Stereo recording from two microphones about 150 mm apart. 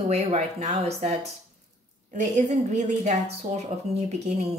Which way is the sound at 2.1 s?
55° right (ahead or behind).